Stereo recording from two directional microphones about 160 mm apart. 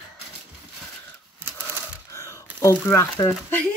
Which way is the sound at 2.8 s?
15° left (ahead or behind).